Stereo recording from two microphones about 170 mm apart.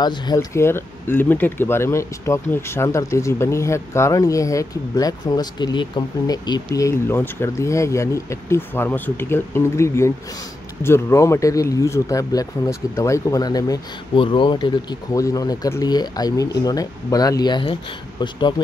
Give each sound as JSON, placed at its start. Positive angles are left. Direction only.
{"t": 0.0, "sound": "speech", "side_deg": 25}